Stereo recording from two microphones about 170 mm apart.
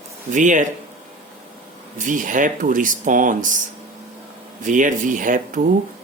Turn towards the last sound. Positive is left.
turn(degrees=-50)  # may be behind; listen again after turning